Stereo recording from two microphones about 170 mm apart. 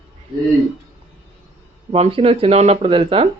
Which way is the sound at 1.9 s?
35° right (ahead or behind).